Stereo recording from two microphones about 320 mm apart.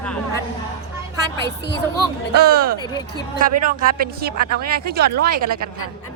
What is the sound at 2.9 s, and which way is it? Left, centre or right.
Speech, centre.